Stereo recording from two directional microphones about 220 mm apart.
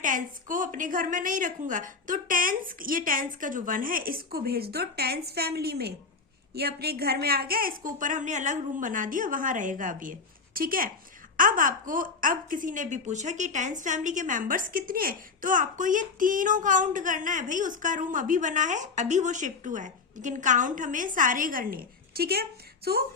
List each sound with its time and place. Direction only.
0.0 s speech: 35° right (ahead or behind)